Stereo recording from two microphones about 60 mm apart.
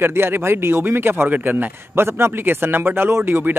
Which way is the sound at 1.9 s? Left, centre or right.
Right.